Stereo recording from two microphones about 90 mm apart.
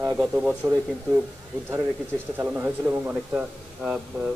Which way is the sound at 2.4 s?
20° right (ahead or behind).